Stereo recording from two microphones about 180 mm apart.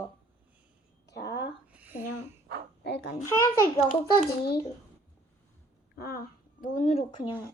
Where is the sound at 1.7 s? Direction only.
10° right (ahead or behind).